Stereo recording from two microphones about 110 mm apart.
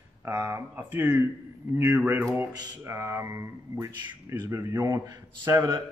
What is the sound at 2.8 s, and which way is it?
A man's voice, 25° right (ahead or behind).